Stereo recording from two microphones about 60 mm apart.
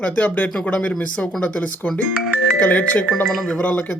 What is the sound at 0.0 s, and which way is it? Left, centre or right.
Speech, left.